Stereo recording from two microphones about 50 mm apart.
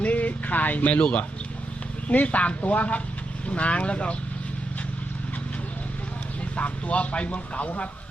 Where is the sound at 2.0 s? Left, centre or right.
Left.